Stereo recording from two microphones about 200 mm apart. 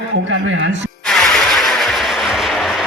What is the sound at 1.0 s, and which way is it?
Vehicle, 5° left (ahead or behind).